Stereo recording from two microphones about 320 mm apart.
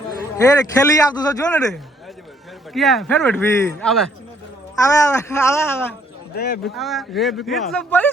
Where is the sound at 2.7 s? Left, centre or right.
Centre.